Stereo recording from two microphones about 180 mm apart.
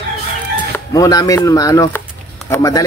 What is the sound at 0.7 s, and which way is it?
Speech, 20° left (ahead or behind).